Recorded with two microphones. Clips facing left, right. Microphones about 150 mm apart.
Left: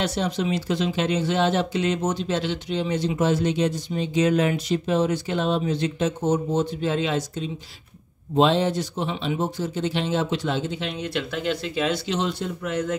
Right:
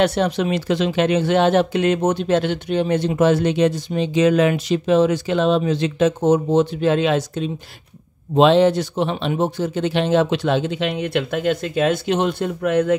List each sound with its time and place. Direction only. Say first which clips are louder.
0.0 s speech: right 7 dB; 60° right (ahead or behind)